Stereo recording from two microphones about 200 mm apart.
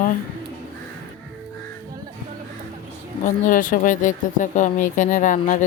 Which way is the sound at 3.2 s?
45° left (ahead or behind).